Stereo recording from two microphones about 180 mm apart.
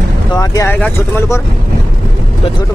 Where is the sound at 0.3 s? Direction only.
20° left (ahead or behind).